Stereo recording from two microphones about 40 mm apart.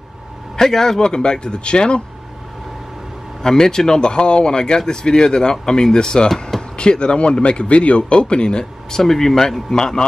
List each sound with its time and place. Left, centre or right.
0.6 s speech: centre
3.4 s speech: centre
9.0 s speech: centre